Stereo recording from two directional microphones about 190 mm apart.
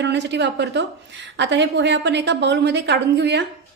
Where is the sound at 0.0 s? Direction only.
65° right (ahead or behind).